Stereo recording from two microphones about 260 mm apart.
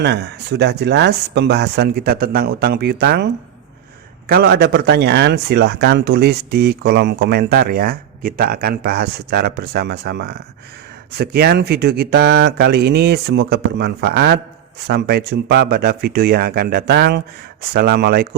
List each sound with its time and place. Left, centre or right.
0.0 s speech: right
4.3 s speech: right